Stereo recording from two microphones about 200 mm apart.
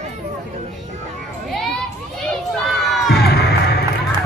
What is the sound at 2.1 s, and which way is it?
Crowd, centre (ahead or behind).